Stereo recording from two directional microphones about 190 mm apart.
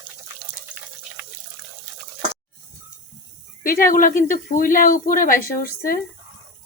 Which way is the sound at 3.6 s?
50° left (ahead or behind).